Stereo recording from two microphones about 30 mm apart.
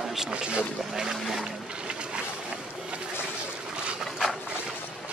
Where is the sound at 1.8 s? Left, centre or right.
Right.